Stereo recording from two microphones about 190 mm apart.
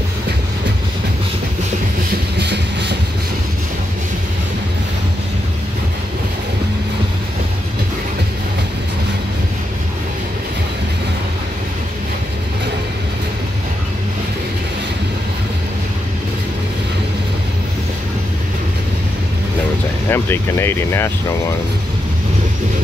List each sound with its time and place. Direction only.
2.3 s train: 60° right (ahead or behind)
20.1 s speech: 10° left (ahead or behind)